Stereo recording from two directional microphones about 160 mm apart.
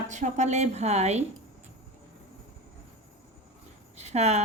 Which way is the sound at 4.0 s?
45° right (ahead or behind).